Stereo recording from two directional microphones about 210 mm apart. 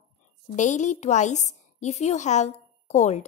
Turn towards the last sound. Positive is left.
turn(degrees=35)  # may be behind; listen again after turning